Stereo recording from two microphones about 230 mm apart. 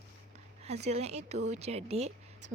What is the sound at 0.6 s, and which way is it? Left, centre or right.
Speech, right.